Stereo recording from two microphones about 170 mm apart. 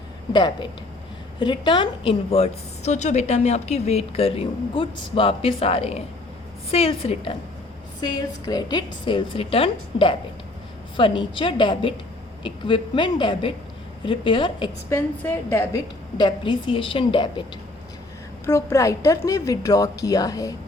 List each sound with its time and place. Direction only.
0.3 s a woman's voice: 25° left (ahead or behind)
8.0 s a woman's voice: 25° left (ahead or behind)
14.8 s a woman's voice: 15° left (ahead or behind); by 17.4 s 30° left (ahead or behind)
18.4 s a woman's voice: 15° left (ahead or behind)